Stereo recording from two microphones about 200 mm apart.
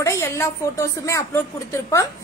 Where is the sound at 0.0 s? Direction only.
15° left (ahead or behind).